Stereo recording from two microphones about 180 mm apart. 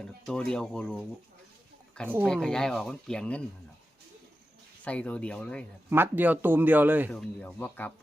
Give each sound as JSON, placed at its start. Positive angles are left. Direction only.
{"t": 0.0, "sound": "speech", "side_deg": 5}
{"t": 2.2, "sound": "speech", "side_deg": 5}
{"t": 4.8, "sound": "speech", "side_deg": 5}
{"t": 5.9, "sound": "speech", "side_deg": -10}
{"t": 7.1, "sound": "speech", "side_deg": 5}